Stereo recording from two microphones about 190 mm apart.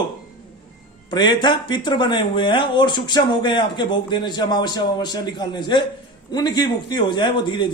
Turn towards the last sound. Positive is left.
turn(degrees=25)  # may be behind; listen again after turning